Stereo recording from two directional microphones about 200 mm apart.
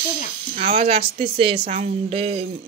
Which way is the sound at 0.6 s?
30° right (ahead or behind).